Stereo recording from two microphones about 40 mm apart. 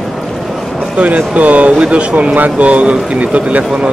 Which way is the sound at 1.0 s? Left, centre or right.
Right.